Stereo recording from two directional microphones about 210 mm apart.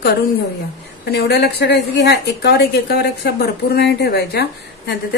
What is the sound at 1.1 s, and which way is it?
A woman's voice, 50° left (ahead or behind).